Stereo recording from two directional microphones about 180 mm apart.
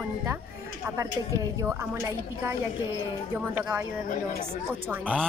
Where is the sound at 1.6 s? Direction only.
15° right (ahead or behind).